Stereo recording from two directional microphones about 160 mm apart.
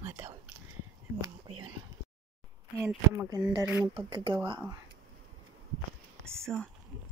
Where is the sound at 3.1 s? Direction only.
20° right (ahead or behind).